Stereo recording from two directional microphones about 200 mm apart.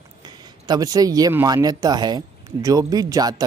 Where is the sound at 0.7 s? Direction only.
15° right (ahead or behind).